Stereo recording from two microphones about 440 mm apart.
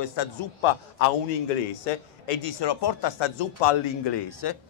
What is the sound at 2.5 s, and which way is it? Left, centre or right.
A man's voice, left.